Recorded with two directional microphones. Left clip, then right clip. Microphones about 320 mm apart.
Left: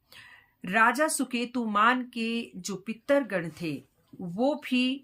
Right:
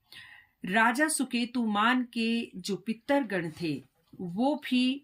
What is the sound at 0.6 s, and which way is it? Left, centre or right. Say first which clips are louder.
Speech: left 2 dB; centre.